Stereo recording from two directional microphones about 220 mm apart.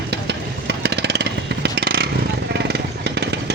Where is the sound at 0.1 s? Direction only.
50° right (ahead or behind).